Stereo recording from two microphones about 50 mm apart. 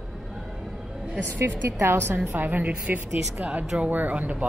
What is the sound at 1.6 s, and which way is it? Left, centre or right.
A woman's voice, right.